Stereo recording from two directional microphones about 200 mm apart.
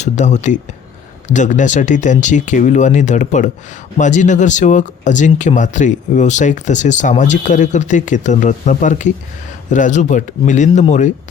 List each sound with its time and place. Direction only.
0.0 s speech: 35° left (ahead or behind)